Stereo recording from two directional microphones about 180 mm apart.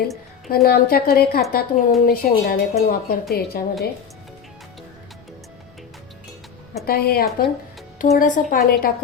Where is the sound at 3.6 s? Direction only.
55° left (ahead or behind).